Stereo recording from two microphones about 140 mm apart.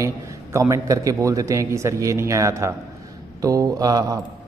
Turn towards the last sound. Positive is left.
turn(degrees=-25)  # may be behind; listen again after turning